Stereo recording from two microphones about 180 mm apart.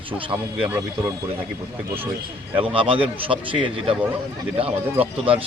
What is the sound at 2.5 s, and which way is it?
Speech, 30° right (ahead or behind).